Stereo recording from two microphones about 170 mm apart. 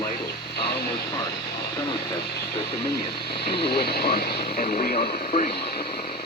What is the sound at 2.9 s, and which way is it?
Speech, 75° left (ahead or behind).